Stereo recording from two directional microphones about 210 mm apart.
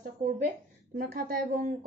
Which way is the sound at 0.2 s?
35° right (ahead or behind).